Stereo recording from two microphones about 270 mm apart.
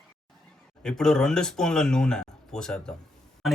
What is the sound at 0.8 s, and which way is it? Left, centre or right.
Speech, centre.